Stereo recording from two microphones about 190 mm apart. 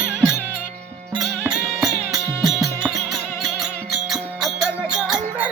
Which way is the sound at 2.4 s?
Centre (ahead or behind).